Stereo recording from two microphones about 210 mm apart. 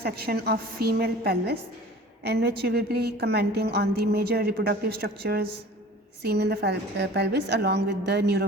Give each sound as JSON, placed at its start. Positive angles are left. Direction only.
{"t": 0.0, "sound": "a woman's voice", "side_deg": -50}